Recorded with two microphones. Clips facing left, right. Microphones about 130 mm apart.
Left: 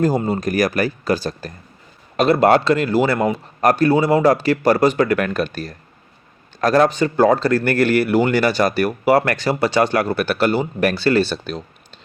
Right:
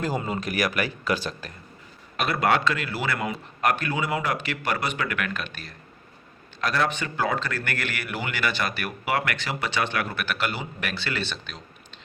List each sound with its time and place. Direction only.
0.0 s speech: 40° left (ahead or behind)